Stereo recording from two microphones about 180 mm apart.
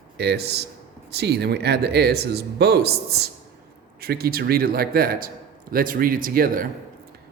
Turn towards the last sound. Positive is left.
turn(degrees=-55)  # may be behind; listen again after turning